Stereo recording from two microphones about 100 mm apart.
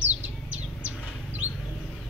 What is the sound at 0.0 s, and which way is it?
Bird, 15° right (ahead or behind).